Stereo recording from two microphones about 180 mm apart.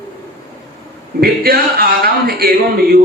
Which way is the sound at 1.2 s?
55° right (ahead or behind).